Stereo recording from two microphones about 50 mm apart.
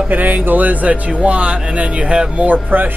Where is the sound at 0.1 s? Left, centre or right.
Right.